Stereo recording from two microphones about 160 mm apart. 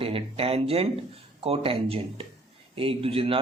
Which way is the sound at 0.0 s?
35° right (ahead or behind).